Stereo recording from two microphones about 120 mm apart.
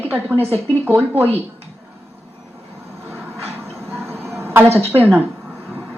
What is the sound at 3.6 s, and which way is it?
Music, 20° right (ahead or behind).